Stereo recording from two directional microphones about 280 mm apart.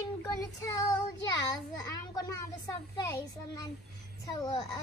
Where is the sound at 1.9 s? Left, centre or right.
Centre.